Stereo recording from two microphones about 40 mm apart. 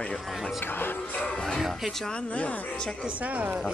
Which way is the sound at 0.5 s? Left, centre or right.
Left.